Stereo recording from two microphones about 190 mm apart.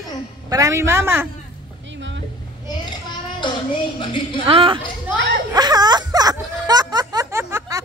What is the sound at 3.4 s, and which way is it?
A woman's voice, 25° left (ahead or behind).